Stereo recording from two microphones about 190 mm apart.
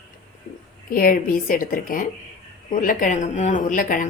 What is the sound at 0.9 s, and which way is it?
A woman's voice, 50° left (ahead or behind).